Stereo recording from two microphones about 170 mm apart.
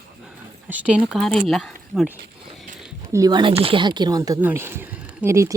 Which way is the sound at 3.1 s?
20° right (ahead or behind).